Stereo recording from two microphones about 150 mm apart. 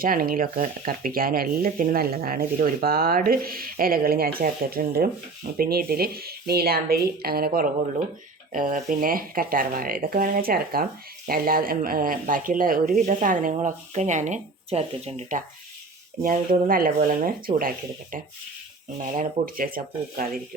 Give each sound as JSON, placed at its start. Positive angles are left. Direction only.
{"t": 0.0, "sound": "speech", "side_deg": -70}
{"t": 8.5, "sound": "speech", "side_deg": -60}
{"t": 13.0, "sound": "speech", "side_deg": -60}
{"t": 16.2, "sound": "speech", "side_deg": -70}
{"t": 19.1, "sound": "speech", "side_deg": -65}